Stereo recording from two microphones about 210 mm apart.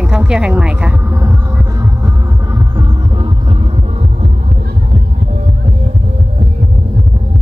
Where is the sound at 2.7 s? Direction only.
25° right (ahead or behind).